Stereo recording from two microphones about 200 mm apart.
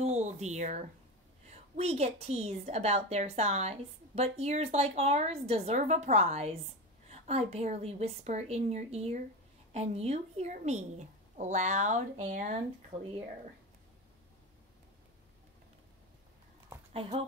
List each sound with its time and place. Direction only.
0.0 s a sound: 35° right (ahead or behind)
1.5 s a woman's voice: 30° right (ahead or behind)
16.9 s speech: 30° right (ahead or behind)